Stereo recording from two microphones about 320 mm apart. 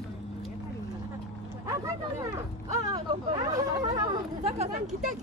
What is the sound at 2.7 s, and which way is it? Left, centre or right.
Speech, centre.